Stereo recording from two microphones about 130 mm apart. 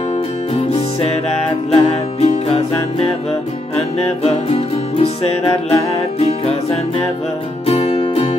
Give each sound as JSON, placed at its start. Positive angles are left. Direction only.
{"t": 1.7, "sound": "music", "side_deg": 50}